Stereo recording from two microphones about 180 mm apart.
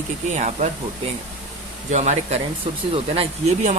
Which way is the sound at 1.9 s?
40° right (ahead or behind).